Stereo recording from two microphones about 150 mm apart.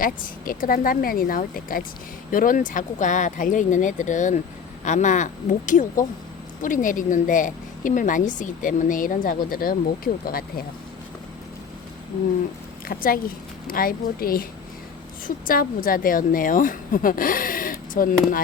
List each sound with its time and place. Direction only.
0.0 s a woman's voice: 70° left (ahead or behind)
12.9 s speech: 75° left (ahead or behind)
15.4 s speech: 70° left (ahead or behind)